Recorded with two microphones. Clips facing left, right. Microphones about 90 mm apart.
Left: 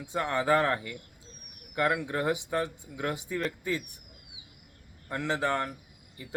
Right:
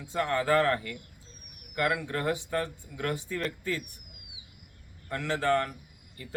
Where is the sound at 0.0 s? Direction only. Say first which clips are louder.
Right 1 dB; 15° left (ahead or behind).